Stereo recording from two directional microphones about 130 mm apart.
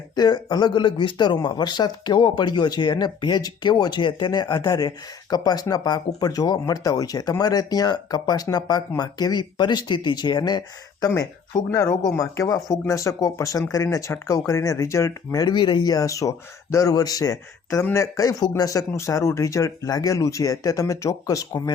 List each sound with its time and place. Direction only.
0.2 s speech: 30° left (ahead or behind)